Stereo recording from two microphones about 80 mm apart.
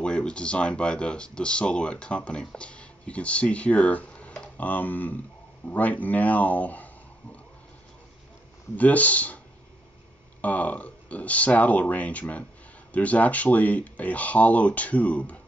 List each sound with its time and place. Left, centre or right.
0.0 s speech: centre
8.7 s speech: centre
10.4 s speech: centre